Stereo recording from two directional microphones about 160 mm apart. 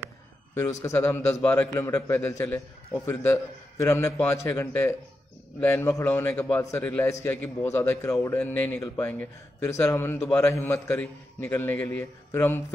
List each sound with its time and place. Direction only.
0.6 s a man's voice: 15° left (ahead or behind)